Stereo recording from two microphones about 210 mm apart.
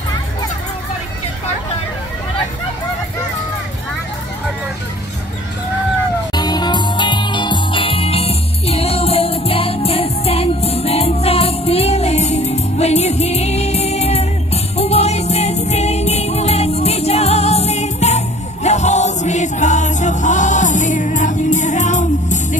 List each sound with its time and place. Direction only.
6.3 s music: 20° left (ahead or behind); by 22.6 s 35° left (ahead or behind)